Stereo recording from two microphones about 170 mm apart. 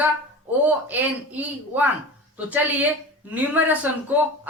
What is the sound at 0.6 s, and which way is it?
A woman's voice, 10° right (ahead or behind).